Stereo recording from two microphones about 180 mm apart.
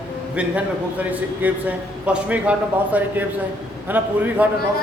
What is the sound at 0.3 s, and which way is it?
A man's voice, 10° right (ahead or behind).